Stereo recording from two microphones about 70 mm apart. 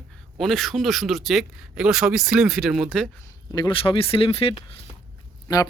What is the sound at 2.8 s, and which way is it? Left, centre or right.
Speech, centre.